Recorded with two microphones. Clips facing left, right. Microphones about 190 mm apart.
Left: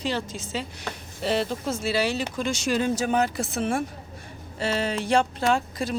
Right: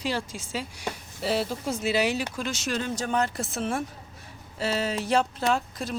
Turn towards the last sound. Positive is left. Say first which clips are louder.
# left 3 dB
turn(degrees=0)  # may be behind; listen again after turning